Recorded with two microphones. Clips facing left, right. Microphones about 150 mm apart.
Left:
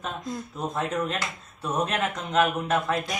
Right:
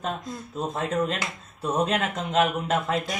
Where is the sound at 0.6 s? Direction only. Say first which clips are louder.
Right 3 dB; 30° right (ahead or behind).